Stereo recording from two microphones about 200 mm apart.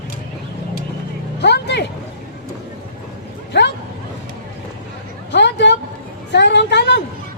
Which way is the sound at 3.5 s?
60° left (ahead or behind).